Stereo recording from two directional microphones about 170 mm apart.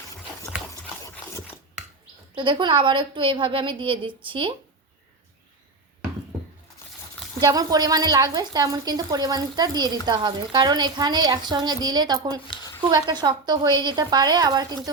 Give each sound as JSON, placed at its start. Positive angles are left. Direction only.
{"t": 2.3, "sound": "a woman's voice", "side_deg": -30}
{"t": 7.3, "sound": "a woman's voice", "side_deg": -20}